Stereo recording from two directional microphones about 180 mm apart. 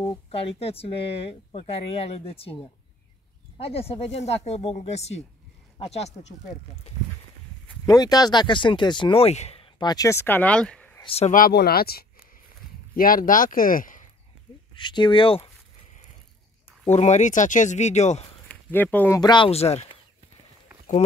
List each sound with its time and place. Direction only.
0.3 s speech: 30° left (ahead or behind)
7.8 s speech: 20° left (ahead or behind)
11.0 s speech: 35° left (ahead or behind)
11.3 s speech: 60° left (ahead or behind)
14.8 s speech: 25° left (ahead or behind)
16.8 s speech: 40° left (ahead or behind)
18.5 s speech: 10° left (ahead or behind); by 20.0 s 35° left (ahead or behind)